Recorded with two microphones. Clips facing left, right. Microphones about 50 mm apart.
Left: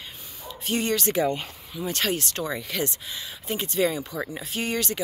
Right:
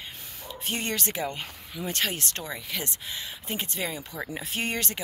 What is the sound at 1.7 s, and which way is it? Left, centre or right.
Speech, right.